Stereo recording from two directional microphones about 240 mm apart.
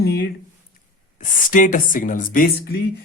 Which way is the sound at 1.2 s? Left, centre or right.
Left.